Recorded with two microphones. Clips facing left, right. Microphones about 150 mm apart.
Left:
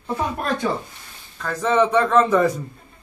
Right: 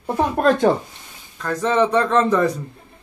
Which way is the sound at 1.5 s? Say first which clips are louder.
Even; 5° left (ahead or behind).